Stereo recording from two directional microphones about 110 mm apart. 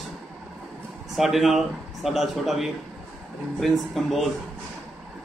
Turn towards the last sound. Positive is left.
turn(degrees=0)  # may be behind; listen again after turning